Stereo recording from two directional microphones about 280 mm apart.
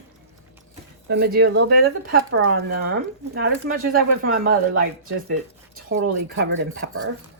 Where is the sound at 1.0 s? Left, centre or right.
Right.